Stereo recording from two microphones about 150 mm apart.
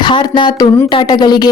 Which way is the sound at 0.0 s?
30° left (ahead or behind).